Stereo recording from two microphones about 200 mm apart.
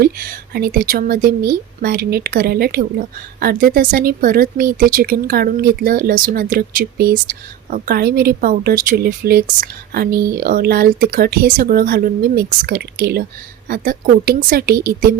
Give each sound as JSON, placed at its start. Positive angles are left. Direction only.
{"t": 0.0, "sound": "a woman's voice", "side_deg": -50}